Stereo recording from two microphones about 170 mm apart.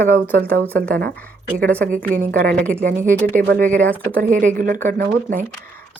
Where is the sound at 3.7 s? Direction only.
10° left (ahead or behind).